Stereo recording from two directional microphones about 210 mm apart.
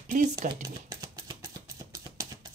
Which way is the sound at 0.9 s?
15° right (ahead or behind).